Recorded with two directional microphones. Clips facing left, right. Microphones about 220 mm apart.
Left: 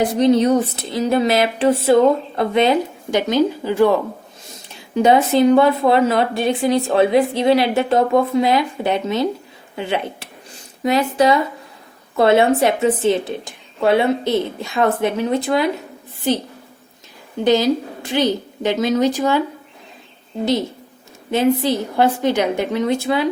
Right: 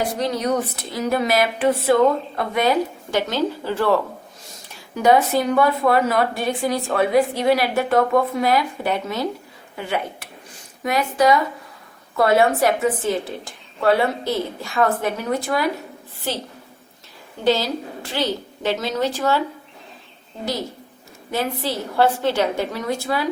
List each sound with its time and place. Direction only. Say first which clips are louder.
0.0 s a woman's voice: left 8 dB; 20° left (ahead or behind)
17.4 s a woman's voice: left 5 dB; 20° left (ahead or behind)
21.2 s a woman's voice: left 8 dB; 20° left (ahead or behind)